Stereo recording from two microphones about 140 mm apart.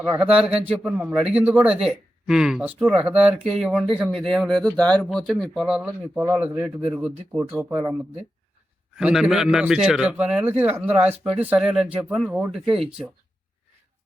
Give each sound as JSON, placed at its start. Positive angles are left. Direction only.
{"t": 0.0, "sound": "a man's voice", "side_deg": -15}
{"t": 0.3, "sound": "a man's voice", "side_deg": -5}
{"t": 9.0, "sound": "a man's voice", "side_deg": -5}